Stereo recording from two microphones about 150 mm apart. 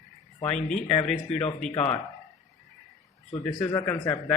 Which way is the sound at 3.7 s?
20° left (ahead or behind).